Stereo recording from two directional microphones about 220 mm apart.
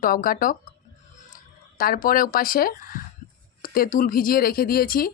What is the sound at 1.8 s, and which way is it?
A woman's voice, 40° left (ahead or behind).